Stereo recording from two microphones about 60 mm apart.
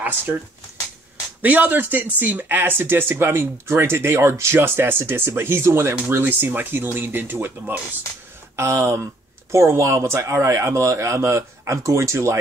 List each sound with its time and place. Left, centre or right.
1.4 s speech: right
8.5 s speech: right